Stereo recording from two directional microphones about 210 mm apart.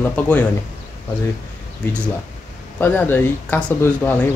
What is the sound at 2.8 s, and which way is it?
Speech, 10° left (ahead or behind).